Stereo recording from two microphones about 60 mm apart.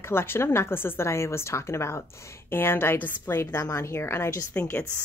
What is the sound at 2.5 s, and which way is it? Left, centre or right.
A woman's voice, left.